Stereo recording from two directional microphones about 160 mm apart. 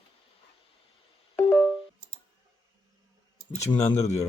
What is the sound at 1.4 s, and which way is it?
Music, 10° left (ahead or behind).